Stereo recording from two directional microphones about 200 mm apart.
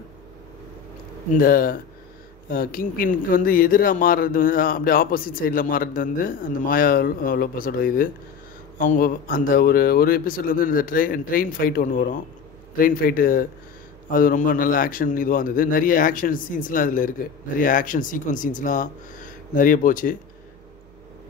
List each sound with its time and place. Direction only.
1.3 s speech: 45° left (ahead or behind)